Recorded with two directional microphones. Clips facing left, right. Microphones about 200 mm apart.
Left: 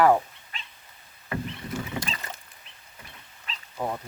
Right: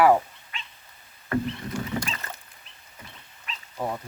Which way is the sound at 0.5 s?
35° left (ahead or behind).